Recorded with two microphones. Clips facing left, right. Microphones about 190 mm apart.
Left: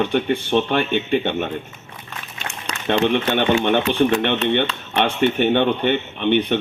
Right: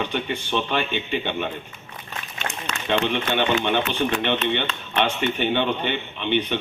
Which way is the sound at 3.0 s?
55° left (ahead or behind).